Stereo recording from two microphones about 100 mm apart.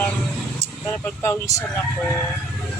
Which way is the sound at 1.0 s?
30° left (ahead or behind).